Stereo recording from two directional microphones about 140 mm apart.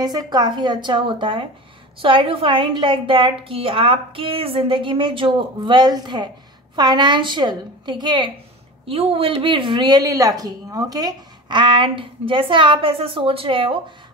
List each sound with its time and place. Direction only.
0.0 s a woman's voice: 30° right (ahead or behind)